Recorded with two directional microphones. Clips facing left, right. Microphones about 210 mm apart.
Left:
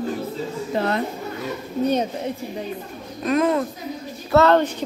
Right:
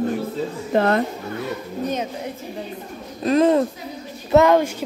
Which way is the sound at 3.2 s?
30° right (ahead or behind).